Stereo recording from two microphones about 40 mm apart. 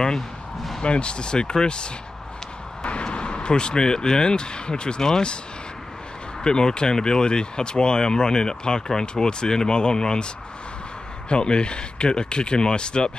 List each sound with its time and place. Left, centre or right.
0.8 s speech: left
6.4 s speech: centre